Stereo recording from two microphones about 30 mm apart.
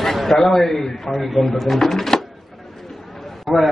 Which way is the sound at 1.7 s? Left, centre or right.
Centre.